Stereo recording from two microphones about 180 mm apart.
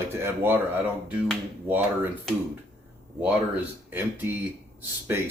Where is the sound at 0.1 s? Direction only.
15° right (ahead or behind).